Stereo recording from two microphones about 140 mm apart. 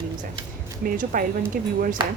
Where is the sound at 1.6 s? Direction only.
90° right.